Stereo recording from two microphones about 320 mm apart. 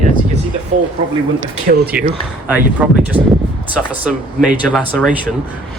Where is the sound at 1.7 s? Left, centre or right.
Right.